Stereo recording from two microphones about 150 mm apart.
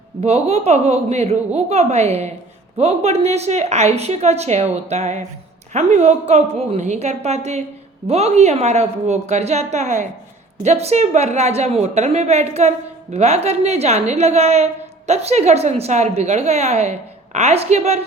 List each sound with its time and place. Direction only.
0.2 s a woman's voice: 45° right (ahead or behind)